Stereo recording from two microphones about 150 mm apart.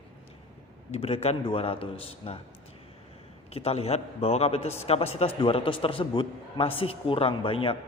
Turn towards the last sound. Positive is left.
turn(degrees=35)  # may be behind; listen again after turning